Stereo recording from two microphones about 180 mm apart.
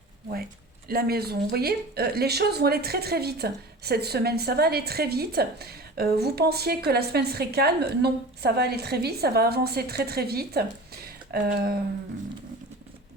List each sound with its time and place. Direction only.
0.9 s speech: 55° right (ahead or behind)